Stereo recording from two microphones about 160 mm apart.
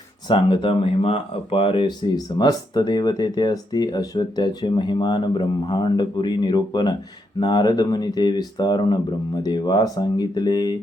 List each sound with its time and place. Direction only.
0.3 s speech: 30° left (ahead or behind)